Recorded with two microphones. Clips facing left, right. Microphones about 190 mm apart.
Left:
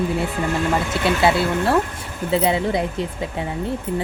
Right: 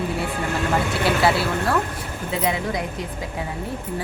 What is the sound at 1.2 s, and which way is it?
Speech, 25° left (ahead or behind).